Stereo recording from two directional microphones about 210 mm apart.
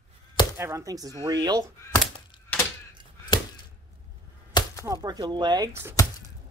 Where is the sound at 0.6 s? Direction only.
15° right (ahead or behind).